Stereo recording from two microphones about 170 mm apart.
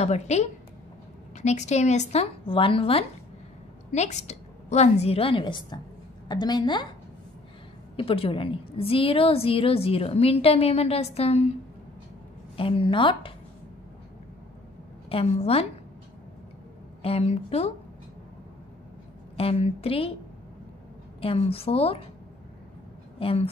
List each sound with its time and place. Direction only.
0.0 s a woman's voice: 40° left (ahead or behind); by 6.9 s 25° left (ahead or behind)
7.9 s a woman's voice: 35° left (ahead or behind)
12.5 s a woman's voice: 30° left (ahead or behind)
15.0 s a woman's voice: 35° left (ahead or behind)
17.0 s a woman's voice: 35° left (ahead or behind)
19.3 s a woman's voice: 35° left (ahead or behind)
21.2 s a woman's voice: 35° left (ahead or behind)
23.1 s a woman's voice: 35° left (ahead or behind)